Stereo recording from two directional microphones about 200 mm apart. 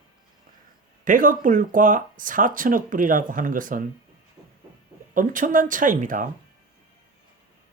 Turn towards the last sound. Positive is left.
turn(degrees=-40)  # may be behind; listen again after turning